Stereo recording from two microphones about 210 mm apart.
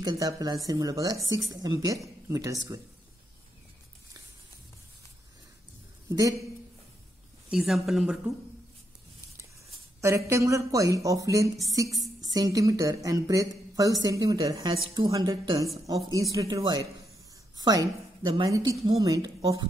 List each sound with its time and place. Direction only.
0.0 s a woman's voice: 15° right (ahead or behind)
6.0 s speech: 15° right (ahead or behind)
7.5 s speech: centre (ahead or behind)
10.0 s a woman's voice: 15° right (ahead or behind)